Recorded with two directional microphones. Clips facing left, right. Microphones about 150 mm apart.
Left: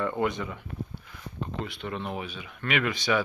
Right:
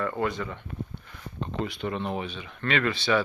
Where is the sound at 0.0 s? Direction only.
20° left (ahead or behind).